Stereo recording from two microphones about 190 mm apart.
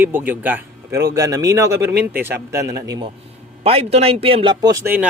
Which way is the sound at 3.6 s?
30° right (ahead or behind).